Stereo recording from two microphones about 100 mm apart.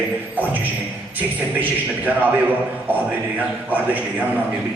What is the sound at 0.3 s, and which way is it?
Speech, 15° right (ahead or behind).